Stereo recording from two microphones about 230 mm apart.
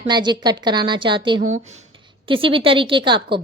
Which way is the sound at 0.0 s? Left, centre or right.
Centre.